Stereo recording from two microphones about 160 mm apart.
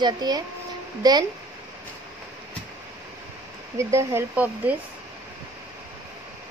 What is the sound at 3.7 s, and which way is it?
Speech, 20° right (ahead or behind).